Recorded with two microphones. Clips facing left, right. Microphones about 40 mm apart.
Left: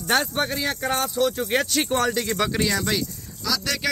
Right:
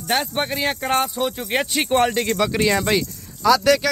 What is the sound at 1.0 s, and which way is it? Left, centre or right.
Speech, centre.